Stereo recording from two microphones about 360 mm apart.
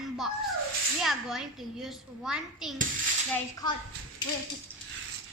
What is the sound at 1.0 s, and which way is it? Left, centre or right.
A child's voice, centre.